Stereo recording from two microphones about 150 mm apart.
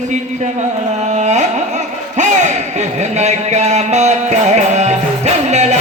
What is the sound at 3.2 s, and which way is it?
Music, 50° right (ahead or behind).